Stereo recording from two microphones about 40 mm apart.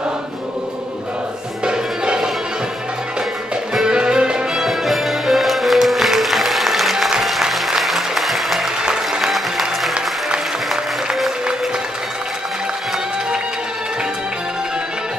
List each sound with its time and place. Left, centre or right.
1.6 s music: right
3.8 s music: right
4.6 s music: centre
7.5 s applause: centre
8.8 s applause: centre
9.3 s music: centre